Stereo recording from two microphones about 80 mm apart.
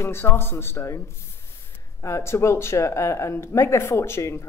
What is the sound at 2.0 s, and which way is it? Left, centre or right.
Speech, left.